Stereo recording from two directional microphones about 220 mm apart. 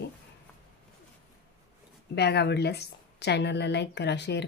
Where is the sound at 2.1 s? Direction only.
50° left (ahead or behind).